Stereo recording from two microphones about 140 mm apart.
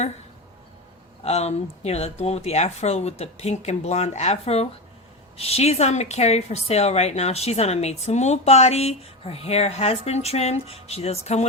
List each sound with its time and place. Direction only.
1.2 s a woman's voice: 50° left (ahead or behind)